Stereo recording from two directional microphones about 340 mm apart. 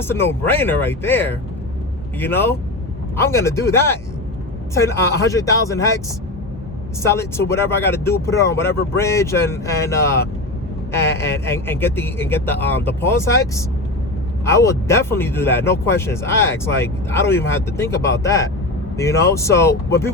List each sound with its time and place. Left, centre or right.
0.0 s speech: centre
7.0 s speech: centre
8.7 s speech: left
9.0 s speech: centre